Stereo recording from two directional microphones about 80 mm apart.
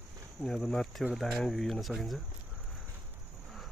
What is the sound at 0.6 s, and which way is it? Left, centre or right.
Speech, centre.